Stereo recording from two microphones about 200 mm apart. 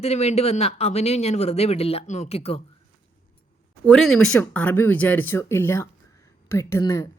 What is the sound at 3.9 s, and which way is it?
A woman's voice, centre (ahead or behind).